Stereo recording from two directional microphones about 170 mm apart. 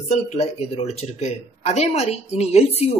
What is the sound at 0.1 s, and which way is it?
Speech, 40° left (ahead or behind).